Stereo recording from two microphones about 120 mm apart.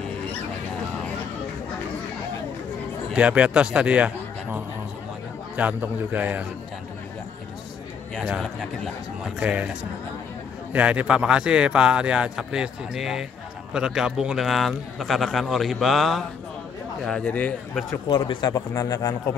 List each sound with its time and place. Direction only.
3.1 s a man's voice: 10° right (ahead or behind)
8.2 s speech: centre (ahead or behind)
10.7 s a man's voice: 10° right (ahead or behind); by 17.6 s 15° left (ahead or behind)
18.1 s speech: 40° left (ahead or behind)